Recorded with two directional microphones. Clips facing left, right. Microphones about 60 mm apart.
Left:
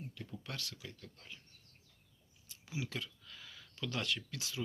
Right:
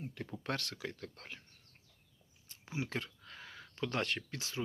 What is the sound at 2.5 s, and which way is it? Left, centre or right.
Speech, right.